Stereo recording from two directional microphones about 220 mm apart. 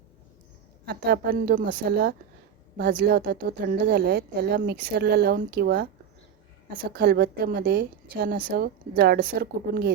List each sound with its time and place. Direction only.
0.9 s speech: 50° right (ahead or behind)
6.9 s speech: 45° right (ahead or behind)